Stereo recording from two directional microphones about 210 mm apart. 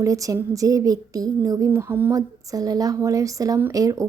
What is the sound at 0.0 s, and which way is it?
A woman's voice, 15° right (ahead or behind).